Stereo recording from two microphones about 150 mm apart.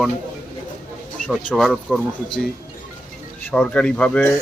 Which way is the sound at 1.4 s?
Centre (ahead or behind).